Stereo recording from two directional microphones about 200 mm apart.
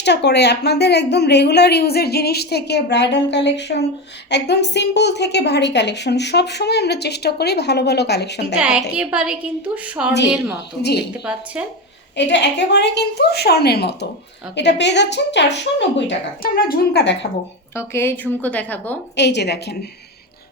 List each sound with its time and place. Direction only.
0.0 s a woman's voice: 60° left (ahead or behind)
8.5 s a woman's voice: 5° right (ahead or behind)
12.1 s a woman's voice: 60° left (ahead or behind)
17.7 s a woman's voice: 10° left (ahead or behind)
19.1 s a woman's voice: 60° left (ahead or behind)